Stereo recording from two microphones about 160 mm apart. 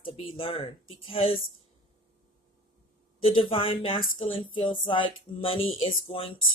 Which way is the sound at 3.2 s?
35° left (ahead or behind).